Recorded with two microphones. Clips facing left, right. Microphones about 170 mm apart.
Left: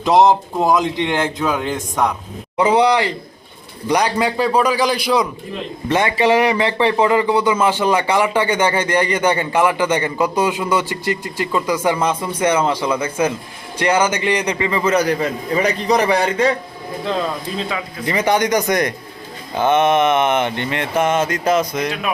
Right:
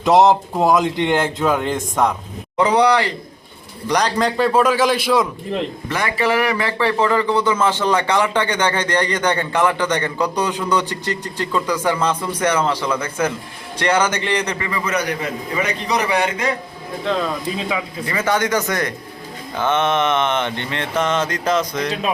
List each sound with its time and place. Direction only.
0.0 s speech: centre (ahead or behind)
2.6 s speech: 10° left (ahead or behind)
5.9 s speech: 20° left (ahead or behind)
14.7 s a man's voice: 30° left (ahead or behind)
18.0 s speech: 20° left (ahead or behind)